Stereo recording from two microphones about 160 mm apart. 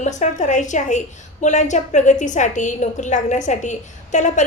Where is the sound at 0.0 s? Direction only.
50° left (ahead or behind).